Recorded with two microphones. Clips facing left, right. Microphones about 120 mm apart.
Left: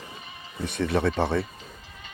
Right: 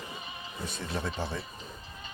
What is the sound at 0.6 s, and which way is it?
Speech, 70° left (ahead or behind).